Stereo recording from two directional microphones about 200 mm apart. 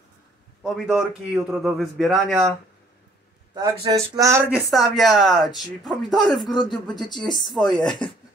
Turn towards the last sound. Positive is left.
turn(degrees=0)  # may be behind; listen again after turning